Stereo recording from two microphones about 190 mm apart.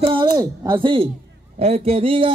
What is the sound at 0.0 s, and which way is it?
A man's voice, 25° right (ahead or behind).